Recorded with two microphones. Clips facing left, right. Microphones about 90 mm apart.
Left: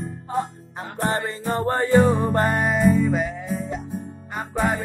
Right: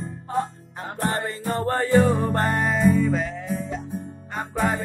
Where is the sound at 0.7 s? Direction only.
20° left (ahead or behind).